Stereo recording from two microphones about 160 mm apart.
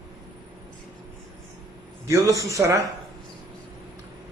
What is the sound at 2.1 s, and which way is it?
Speech, 20° right (ahead or behind).